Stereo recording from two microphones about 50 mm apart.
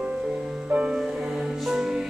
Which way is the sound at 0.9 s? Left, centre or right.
Centre.